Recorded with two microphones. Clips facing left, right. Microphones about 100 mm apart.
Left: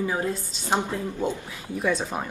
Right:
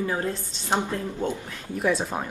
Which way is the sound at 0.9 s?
15° left (ahead or behind).